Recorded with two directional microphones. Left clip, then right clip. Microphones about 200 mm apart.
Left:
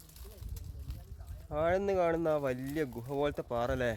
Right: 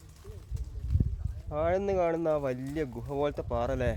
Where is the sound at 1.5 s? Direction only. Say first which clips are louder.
Right 2 dB; 5° left (ahead or behind).